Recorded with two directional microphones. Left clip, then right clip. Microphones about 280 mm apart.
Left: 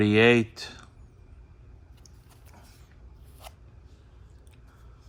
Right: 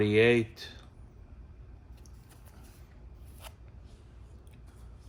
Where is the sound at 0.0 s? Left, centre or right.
Left.